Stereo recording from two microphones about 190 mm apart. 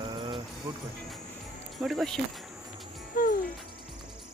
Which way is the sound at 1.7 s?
Centre (ahead or behind).